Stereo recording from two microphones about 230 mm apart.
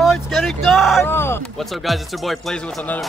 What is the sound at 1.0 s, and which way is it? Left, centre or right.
Speech, centre.